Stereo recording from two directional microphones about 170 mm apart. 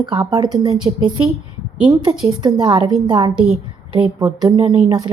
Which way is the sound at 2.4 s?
25° right (ahead or behind).